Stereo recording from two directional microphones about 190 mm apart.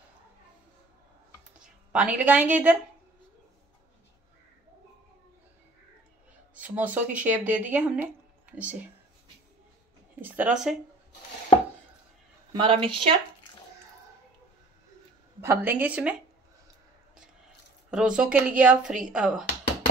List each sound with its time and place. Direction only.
1.9 s a woman's voice: 5° right (ahead or behind)
6.5 s speech: 5° right (ahead or behind)
10.2 s a woman's voice: 10° right (ahead or behind)
12.5 s a woman's voice: 25° right (ahead or behind)
15.4 s a woman's voice: 15° right (ahead or behind)
17.9 s a woman's voice: 5° right (ahead or behind)